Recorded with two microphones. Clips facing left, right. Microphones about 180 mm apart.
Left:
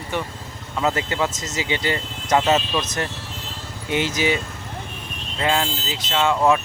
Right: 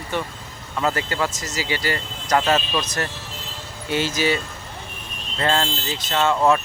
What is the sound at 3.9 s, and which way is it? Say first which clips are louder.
Speech: even; 20° left (ahead or behind).